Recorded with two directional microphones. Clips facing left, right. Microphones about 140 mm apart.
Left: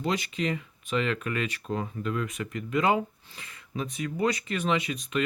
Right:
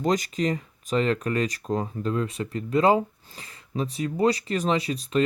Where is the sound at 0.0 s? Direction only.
40° right (ahead or behind).